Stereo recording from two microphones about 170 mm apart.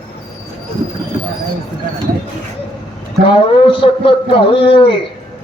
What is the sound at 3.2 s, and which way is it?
A man's voice, 30° left (ahead or behind).